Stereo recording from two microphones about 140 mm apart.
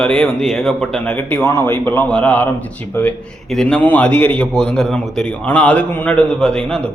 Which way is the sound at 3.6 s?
5° left (ahead or behind).